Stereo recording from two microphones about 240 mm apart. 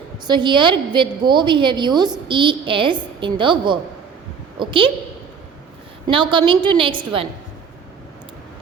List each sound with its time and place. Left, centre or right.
0.3 s a woman's voice: centre
6.1 s a woman's voice: right